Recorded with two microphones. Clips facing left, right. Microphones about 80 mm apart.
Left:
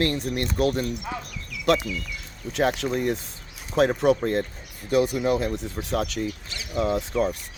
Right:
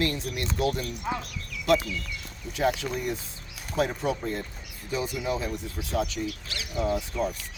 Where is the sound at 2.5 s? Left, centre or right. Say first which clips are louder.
Left 3 dB; left.